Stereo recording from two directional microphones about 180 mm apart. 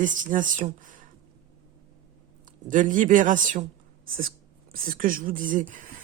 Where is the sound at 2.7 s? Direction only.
45° right (ahead or behind).